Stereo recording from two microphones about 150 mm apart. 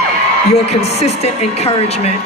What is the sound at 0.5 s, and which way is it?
Speech, 45° left (ahead or behind).